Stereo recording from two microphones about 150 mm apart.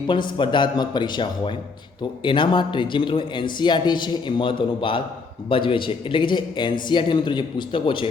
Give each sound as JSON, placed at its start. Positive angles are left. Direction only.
{"t": 0.1, "sound": "a man's voice", "side_deg": 35}